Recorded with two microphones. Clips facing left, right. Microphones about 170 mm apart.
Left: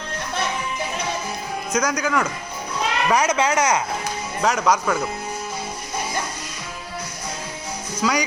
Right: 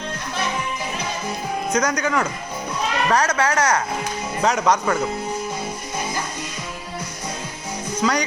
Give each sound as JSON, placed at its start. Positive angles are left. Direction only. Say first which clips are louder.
{"t": 1.7, "sound": "speech", "louder": "even", "side_deg": 5}
{"t": 3.1, "sound": "speech", "louder": "left 1 dB", "side_deg": 15}
{"t": 4.4, "sound": "speech", "louder": "right 1 dB", "side_deg": 0}
{"t": 8.0, "sound": "speech", "louder": "right 1 dB", "side_deg": 5}